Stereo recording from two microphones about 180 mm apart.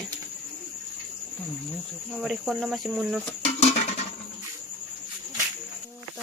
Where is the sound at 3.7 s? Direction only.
40° left (ahead or behind).